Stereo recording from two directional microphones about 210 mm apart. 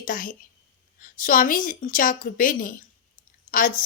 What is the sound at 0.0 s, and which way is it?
A woman's voice, 40° left (ahead or behind).